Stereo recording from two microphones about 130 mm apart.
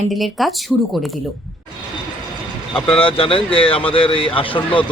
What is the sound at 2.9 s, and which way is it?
Speech, 45° left (ahead or behind).